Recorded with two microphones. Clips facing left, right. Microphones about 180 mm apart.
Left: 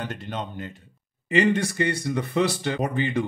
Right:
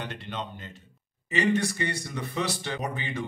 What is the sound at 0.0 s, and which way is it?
Speech, 45° left (ahead or behind).